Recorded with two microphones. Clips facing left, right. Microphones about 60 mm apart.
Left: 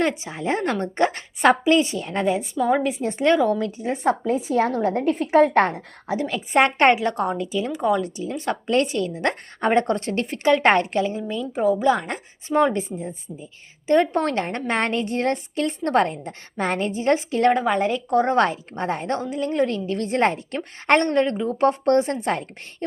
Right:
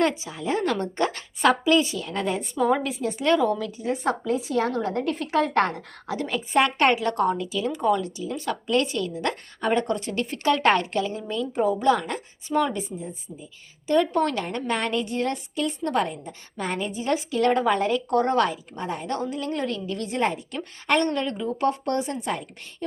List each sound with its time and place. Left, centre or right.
0.1 s a woman's voice: left
2.2 s a woman's voice: centre
3.0 s a woman's voice: left
7.7 s a woman's voice: centre
8.0 s a woman's voice: left
9.6 s a woman's voice: left
10.2 s a woman's voice: left
11.2 s a woman's voice: centre
11.9 s a woman's voice: left
13.8 s a woman's voice: left
17.5 s a woman's voice: centre
18.3 s a woman's voice: left
19.2 s a woman's voice: left
20.1 s a woman's voice: left